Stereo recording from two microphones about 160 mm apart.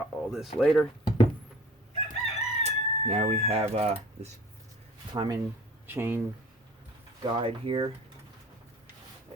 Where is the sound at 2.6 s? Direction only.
45° right (ahead or behind).